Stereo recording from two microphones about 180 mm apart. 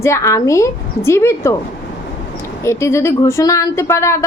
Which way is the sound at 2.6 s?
15° left (ahead or behind).